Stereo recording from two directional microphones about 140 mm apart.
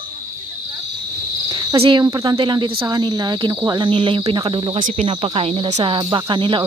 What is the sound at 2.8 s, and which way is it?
Speech, 30° right (ahead or behind).